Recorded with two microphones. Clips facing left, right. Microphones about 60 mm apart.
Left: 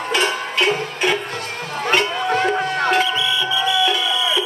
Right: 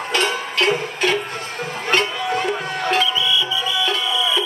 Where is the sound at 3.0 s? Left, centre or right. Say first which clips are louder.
Even; left.